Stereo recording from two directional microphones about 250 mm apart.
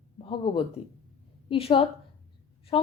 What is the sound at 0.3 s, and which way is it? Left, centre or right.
A woman's voice, left.